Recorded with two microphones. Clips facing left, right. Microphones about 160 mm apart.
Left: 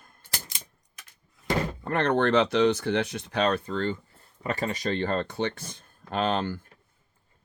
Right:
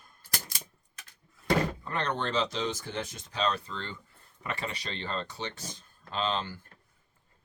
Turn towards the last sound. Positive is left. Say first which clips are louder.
# left 5 dB
turn(degrees=55)  # may be behind; listen again after turning